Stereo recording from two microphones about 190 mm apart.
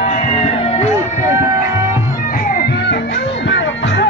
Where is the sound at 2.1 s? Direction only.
45° left (ahead or behind); by 4.1 s 65° left (ahead or behind).